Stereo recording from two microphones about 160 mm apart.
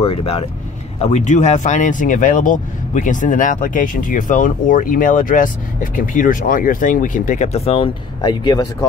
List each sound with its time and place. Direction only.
0.0 s speech: 35° left (ahead or behind)